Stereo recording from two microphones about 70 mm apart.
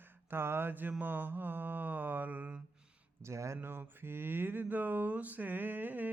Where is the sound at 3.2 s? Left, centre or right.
Right.